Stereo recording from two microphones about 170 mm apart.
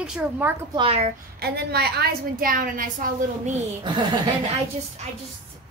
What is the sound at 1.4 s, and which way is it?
A woman's voice, 70° right (ahead or behind).